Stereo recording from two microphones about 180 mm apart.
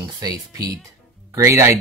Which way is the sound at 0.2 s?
20° right (ahead or behind).